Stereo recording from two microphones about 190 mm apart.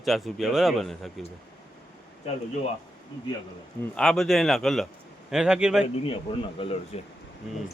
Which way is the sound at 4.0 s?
Centre (ahead or behind).